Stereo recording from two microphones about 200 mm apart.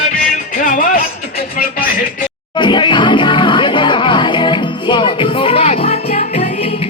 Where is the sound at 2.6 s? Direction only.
25° left (ahead or behind).